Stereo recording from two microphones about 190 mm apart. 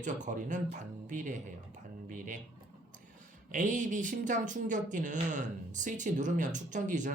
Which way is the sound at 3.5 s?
40° right (ahead or behind).